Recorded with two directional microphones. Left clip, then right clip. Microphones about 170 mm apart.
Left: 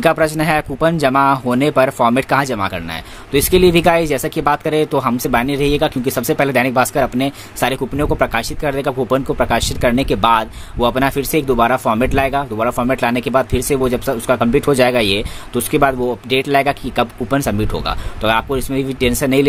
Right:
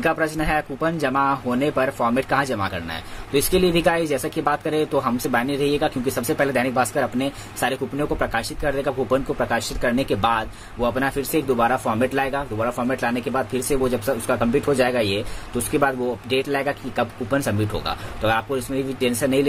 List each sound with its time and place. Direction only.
0.0 s speech: 50° left (ahead or behind)